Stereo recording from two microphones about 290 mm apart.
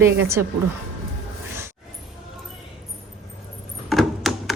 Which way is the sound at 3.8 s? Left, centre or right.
Centre.